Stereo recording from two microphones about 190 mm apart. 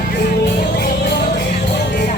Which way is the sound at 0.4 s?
55° left (ahead or behind).